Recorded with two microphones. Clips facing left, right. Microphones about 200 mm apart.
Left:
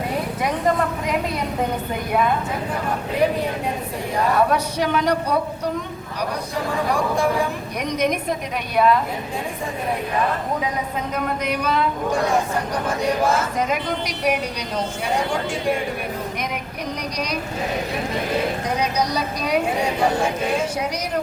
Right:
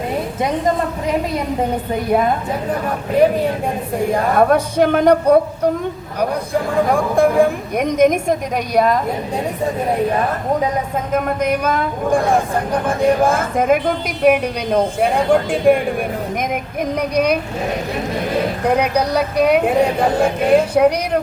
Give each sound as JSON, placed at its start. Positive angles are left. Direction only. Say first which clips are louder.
{"t": 4.4, "sound": "speech", "louder": "right 9 dB", "side_deg": -50}
{"t": 11.1, "sound": "speech", "louder": "right 8 dB", "side_deg": -50}
{"t": 17.0, "sound": "speech", "louder": "right 14 dB", "side_deg": -55}
{"t": 18.6, "sound": "speech", "louder": "right 6 dB", "side_deg": -60}